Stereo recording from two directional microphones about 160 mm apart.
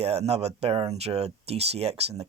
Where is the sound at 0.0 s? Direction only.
40° right (ahead or behind).